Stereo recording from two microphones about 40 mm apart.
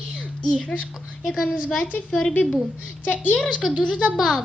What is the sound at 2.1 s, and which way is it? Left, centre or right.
Speech, centre.